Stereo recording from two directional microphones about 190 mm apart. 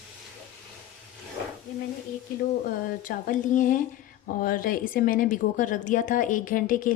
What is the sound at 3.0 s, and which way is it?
A woman's voice, 45° left (ahead or behind).